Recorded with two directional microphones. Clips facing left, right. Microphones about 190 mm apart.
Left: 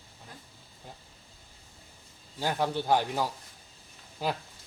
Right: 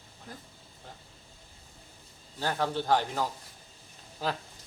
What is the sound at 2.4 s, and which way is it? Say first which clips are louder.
Speech: left 1 dB; 10° left (ahead or behind).